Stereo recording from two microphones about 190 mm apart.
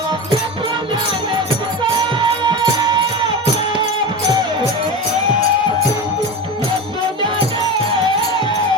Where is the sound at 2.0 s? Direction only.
25° right (ahead or behind).